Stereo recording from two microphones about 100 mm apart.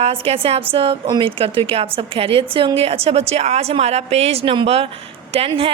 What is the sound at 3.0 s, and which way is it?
A woman's voice, 90° right.